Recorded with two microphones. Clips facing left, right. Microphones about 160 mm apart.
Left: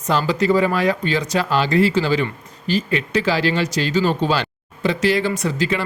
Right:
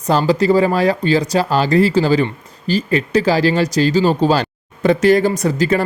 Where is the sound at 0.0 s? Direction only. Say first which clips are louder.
Right 4 dB; 35° right (ahead or behind).